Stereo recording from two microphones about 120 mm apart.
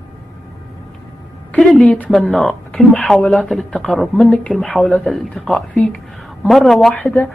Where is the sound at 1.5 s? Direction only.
5° left (ahead or behind).